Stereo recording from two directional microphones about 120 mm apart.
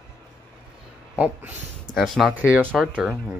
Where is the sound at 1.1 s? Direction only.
15° right (ahead or behind).